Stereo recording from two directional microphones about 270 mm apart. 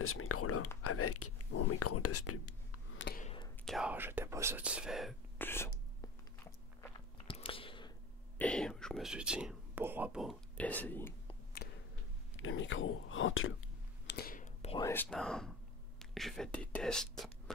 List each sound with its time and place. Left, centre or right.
0.0 s speech: left
3.1 s whispering: left
3.6 s speech: centre
5.9 s biting: centre
8.4 s speech: centre
11.6 s a sound: left
12.4 s speech: left
14.0 s whispering: left
14.9 s speech: centre